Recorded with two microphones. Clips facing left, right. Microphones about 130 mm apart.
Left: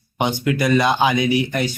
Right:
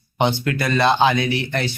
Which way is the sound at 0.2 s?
15° left (ahead or behind).